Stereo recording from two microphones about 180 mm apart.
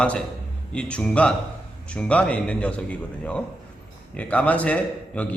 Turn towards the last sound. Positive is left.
turn(degrees=10)  # may be behind; listen again after turning